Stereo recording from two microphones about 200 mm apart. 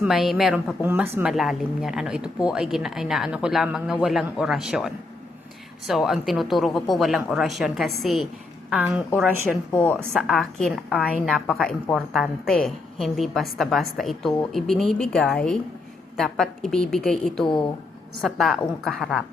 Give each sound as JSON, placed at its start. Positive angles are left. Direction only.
{"t": 0.0, "sound": "a woman's voice", "side_deg": 0}
{"t": 5.9, "sound": "a woman's voice", "side_deg": 0}
{"t": 9.7, "sound": "a woman's voice", "side_deg": 10}
{"t": 17.4, "sound": "speech", "side_deg": 25}
{"t": 18.2, "sound": "a woman's voice", "side_deg": 0}